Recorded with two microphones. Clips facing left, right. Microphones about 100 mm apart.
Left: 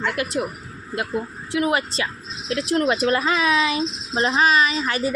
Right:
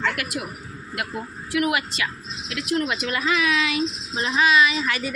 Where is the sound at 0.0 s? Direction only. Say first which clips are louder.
Left 3 dB; 20° left (ahead or behind).